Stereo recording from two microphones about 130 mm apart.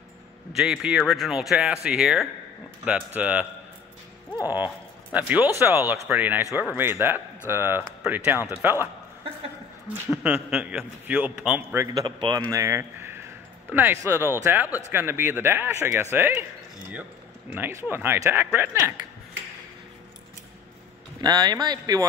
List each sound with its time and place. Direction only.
0.5 s a man's voice: 5° right (ahead or behind)
5.1 s a man's voice: 10° right (ahead or behind)
10.1 s a man's voice: 5° right (ahead or behind)
12.2 s speech: 35° right (ahead or behind)
12.5 s a man's voice: 20° right (ahead or behind)
17.5 s a man's voice: 15° right (ahead or behind)
21.2 s speech: 30° right (ahead or behind)